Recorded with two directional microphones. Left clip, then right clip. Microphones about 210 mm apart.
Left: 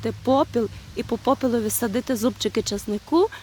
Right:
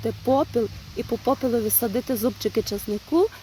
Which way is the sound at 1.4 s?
25° left (ahead or behind).